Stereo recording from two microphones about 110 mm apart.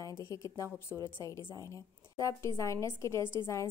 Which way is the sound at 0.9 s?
20° right (ahead or behind).